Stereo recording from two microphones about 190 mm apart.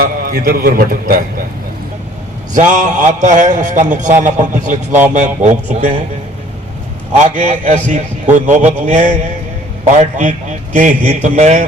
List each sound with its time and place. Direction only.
0.0 s a man's voice: 50° right (ahead or behind)
2.6 s a man's voice: 45° right (ahead or behind)
7.2 s a man's voice: 35° right (ahead or behind)